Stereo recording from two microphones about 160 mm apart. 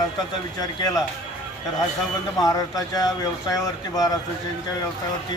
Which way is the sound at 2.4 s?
20° left (ahead or behind).